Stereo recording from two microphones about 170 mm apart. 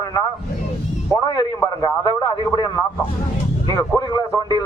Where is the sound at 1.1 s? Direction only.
20° left (ahead or behind).